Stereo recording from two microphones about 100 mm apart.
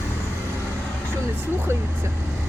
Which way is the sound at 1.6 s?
25° right (ahead or behind).